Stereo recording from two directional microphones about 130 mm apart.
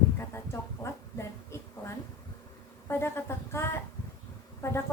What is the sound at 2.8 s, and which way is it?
A woman's voice, 20° left (ahead or behind).